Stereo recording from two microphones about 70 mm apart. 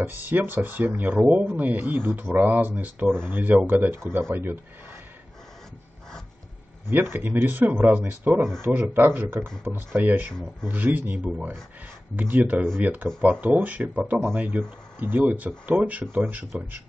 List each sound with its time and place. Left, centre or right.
0.0 s speech: right
6.9 s speech: right